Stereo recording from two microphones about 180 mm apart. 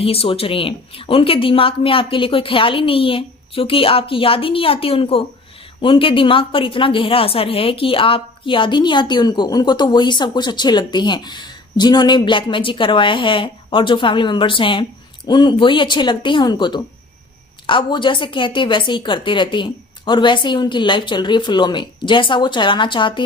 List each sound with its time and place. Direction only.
0.0 s a woman's voice: 30° left (ahead or behind)